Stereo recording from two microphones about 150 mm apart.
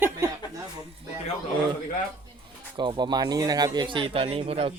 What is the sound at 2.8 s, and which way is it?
Speech, 30° right (ahead or behind).